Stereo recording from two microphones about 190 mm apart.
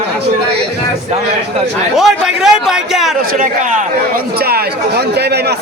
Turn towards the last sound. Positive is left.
turn(degrees=-45)  # may be behind; listen again after turning